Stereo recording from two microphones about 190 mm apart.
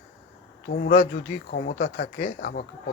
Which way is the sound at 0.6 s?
45° left (ahead or behind).